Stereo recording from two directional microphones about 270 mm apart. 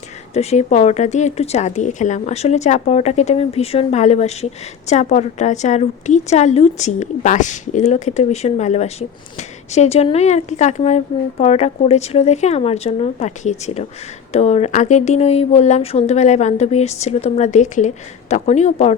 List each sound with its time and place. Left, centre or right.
0.3 s a woman's voice: left